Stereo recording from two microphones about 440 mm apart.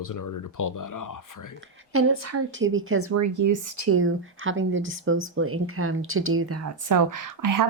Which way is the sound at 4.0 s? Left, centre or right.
Right.